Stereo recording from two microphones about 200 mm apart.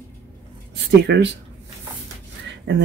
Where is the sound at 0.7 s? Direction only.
60° right (ahead or behind).